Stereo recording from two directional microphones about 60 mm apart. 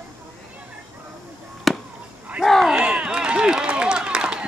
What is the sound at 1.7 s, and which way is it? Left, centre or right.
Chop, centre.